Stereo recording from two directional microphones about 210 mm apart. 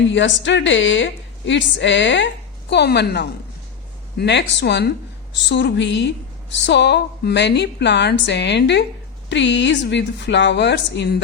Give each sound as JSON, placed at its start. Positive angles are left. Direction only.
{"t": 0.1, "sound": "a woman's voice", "side_deg": 60}